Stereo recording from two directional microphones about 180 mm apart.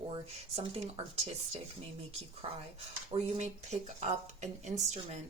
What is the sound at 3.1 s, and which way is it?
Speech, 40° right (ahead or behind).